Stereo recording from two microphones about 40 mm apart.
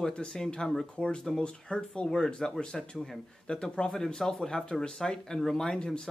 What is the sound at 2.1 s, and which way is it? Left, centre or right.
Speech, centre.